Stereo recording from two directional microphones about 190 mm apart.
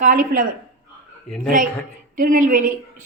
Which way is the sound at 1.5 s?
45° right (ahead or behind).